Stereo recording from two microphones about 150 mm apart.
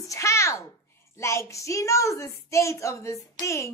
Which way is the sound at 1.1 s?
20° left (ahead or behind).